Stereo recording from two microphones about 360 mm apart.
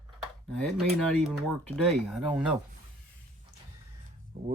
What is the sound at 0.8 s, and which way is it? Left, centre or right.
Speech, centre.